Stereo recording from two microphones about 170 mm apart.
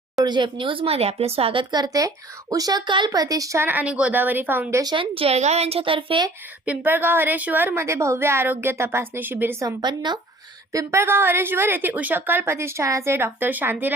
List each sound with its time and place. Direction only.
0.2 s speech: 25° right (ahead or behind)
6.7 s a woman's voice: 10° right (ahead or behind)